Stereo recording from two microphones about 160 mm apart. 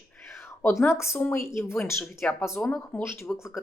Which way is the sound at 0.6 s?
15° left (ahead or behind).